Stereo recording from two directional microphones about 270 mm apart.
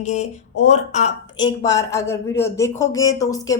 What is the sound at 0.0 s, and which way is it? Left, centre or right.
Speech, left.